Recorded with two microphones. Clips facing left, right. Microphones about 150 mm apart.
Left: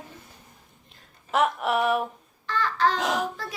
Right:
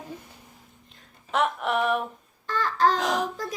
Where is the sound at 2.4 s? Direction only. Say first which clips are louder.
Right 1 dB; 45° right (ahead or behind).